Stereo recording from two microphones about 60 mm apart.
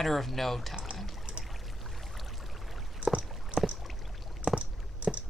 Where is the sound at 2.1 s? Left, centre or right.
Centre.